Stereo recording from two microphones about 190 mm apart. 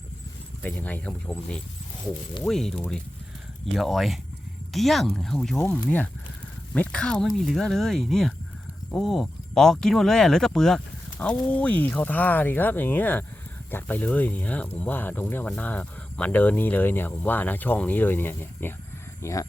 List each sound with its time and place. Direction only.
0.6 s speech: 10° left (ahead or behind)